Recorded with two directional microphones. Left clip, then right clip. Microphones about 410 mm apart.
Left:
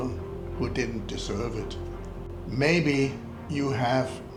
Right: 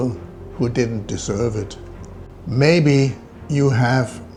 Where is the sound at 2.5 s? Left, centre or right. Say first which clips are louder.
Right 8 dB; right.